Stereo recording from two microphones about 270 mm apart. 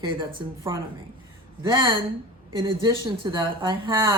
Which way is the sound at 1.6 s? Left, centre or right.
Centre.